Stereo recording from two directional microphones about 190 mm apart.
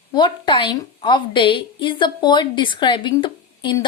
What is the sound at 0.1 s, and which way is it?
A woman's voice, 25° left (ahead or behind).